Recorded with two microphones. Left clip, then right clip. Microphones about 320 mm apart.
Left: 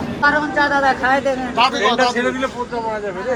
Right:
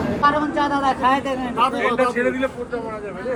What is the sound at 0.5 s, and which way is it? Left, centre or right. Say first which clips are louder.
Speech: left 4 dB; right.